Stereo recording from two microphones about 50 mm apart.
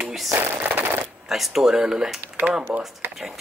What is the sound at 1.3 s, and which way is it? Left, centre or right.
Speech, centre.